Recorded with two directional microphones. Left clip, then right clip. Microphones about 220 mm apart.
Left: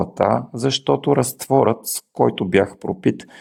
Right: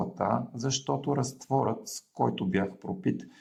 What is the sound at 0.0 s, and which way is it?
Speech, 45° left (ahead or behind).